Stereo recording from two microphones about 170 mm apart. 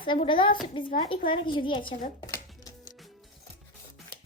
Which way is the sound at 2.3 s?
20° left (ahead or behind).